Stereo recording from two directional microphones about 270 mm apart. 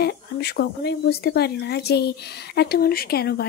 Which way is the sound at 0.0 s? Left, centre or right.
Left.